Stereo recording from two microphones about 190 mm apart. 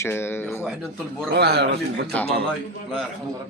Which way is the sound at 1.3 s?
60° right (ahead or behind).